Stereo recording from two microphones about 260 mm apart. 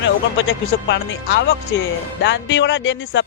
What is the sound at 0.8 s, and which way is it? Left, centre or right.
Speech, left.